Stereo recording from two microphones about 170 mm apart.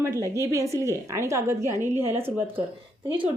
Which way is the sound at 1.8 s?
40° right (ahead or behind).